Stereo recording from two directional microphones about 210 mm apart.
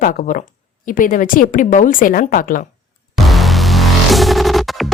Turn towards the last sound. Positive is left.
turn(degrees=0)  # may be behind; listen again after turning